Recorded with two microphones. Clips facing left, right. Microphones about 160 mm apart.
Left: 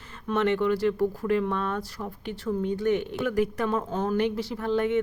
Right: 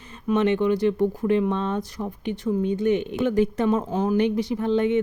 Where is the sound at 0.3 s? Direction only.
20° right (ahead or behind).